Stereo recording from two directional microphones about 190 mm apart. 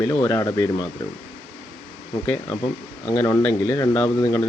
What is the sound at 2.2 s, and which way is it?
Speech, 10° left (ahead or behind).